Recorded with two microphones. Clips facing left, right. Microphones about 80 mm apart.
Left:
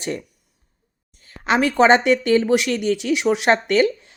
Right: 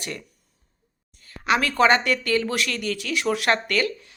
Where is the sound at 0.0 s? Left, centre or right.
Left.